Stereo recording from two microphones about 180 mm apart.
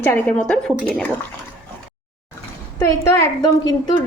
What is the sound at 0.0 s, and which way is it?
A woman's voice, 10° left (ahead or behind).